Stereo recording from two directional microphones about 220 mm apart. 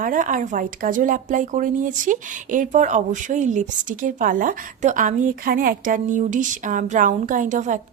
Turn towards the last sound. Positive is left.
turn(degrees=-35)  # may be behind; listen again after turning